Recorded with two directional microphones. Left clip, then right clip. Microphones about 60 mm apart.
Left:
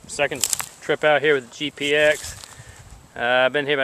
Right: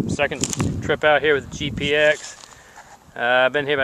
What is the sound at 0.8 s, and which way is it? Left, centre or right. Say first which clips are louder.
Speech: right 1 dB; centre.